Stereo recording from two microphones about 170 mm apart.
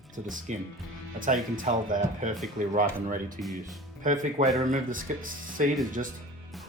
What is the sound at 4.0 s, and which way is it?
Speech, 50° right (ahead or behind).